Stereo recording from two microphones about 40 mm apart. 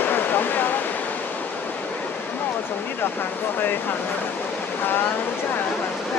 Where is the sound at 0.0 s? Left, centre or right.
Left.